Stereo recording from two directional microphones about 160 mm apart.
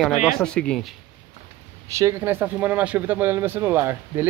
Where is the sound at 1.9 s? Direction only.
15° right (ahead or behind).